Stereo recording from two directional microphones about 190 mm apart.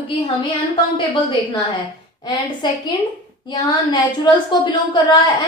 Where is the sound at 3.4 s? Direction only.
25° left (ahead or behind).